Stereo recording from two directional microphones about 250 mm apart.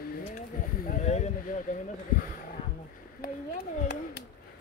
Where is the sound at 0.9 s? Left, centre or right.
Left.